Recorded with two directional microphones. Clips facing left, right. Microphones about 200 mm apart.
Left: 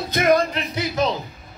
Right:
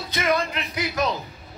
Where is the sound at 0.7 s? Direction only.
25° left (ahead or behind).